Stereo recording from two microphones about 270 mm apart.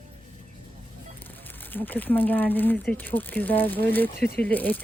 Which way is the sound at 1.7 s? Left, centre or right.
Centre.